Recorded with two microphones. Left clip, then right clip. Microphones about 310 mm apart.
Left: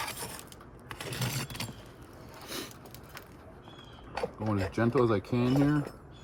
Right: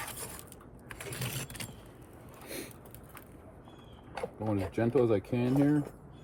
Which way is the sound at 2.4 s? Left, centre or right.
Left.